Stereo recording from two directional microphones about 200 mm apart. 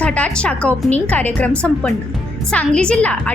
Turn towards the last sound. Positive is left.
turn(degrees=5)  # may be behind; listen again after turning